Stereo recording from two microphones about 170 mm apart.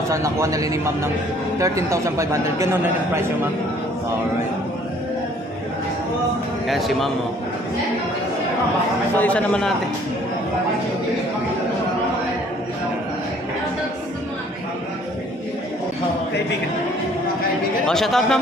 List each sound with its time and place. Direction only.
0.1 s a man's voice: 15° right (ahead or behind)
6.7 s speech: centre (ahead or behind)
9.1 s a man's voice: 10° left (ahead or behind)
17.8 s speech: centre (ahead or behind)